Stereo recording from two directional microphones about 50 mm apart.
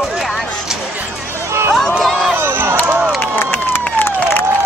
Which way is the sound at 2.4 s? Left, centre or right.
Right.